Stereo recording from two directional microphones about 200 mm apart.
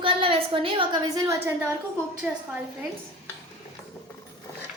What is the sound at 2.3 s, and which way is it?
Speech, 5° right (ahead or behind).